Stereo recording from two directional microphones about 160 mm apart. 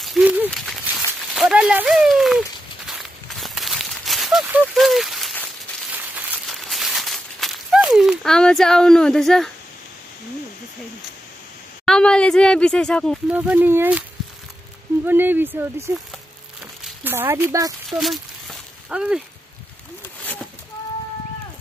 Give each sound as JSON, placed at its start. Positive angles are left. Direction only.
{"t": 0.0, "sound": "a sound", "side_deg": -5}
{"t": 2.9, "sound": "walk", "side_deg": 0}
{"t": 4.7, "sound": "a sound", "side_deg": 0}
{"t": 11.8, "sound": "speech", "side_deg": 5}
{"t": 13.3, "sound": "speech", "side_deg": -10}
{"t": 15.0, "sound": "speech", "side_deg": -10}
{"t": 17.8, "sound": "speech", "side_deg": 0}